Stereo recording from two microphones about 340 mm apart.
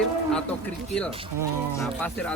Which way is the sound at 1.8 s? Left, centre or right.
Centre.